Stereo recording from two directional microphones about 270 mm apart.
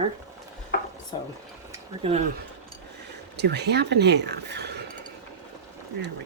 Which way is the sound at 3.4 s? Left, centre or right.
Right.